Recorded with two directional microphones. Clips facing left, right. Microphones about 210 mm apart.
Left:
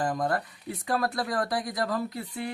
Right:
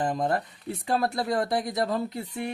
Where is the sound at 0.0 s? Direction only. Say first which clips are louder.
Right 1 dB; 25° right (ahead or behind).